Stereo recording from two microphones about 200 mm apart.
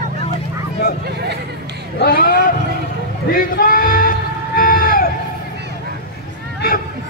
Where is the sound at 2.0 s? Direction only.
50° left (ahead or behind).